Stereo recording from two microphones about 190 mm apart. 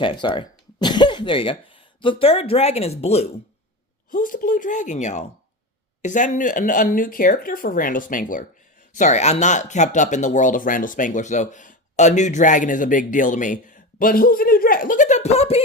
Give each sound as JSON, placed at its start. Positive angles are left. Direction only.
{"t": 0.0, "sound": "speech", "side_deg": 25}
{"t": 4.1, "sound": "speech", "side_deg": 45}